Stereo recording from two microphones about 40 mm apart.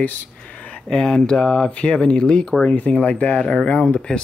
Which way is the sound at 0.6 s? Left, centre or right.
Left.